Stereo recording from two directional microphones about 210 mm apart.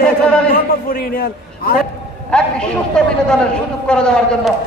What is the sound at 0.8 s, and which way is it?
Speech, 45° left (ahead or behind).